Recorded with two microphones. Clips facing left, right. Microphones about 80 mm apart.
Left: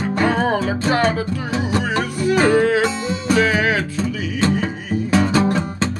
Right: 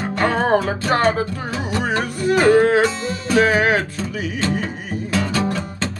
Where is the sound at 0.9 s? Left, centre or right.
Right.